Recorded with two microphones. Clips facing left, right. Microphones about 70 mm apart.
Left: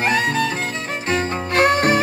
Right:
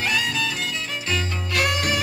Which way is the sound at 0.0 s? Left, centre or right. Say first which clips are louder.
Left 6 dB; left.